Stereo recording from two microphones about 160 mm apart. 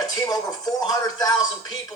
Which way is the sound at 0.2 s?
25° left (ahead or behind).